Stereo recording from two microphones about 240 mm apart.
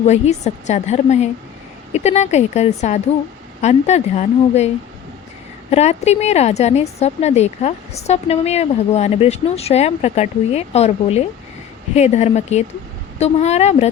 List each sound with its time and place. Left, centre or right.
0.0 s a woman's voice: left
5.7 s a woman's voice: left